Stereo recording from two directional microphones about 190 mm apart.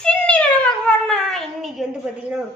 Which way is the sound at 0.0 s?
5° left (ahead or behind).